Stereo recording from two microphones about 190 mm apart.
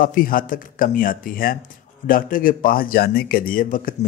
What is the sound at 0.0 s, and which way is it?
A man's voice, 45° left (ahead or behind).